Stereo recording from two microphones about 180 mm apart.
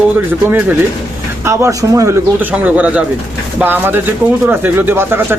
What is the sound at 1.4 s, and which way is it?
Speech, 15° right (ahead or behind).